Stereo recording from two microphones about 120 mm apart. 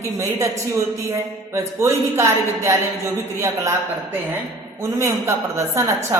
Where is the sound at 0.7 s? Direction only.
20° right (ahead or behind).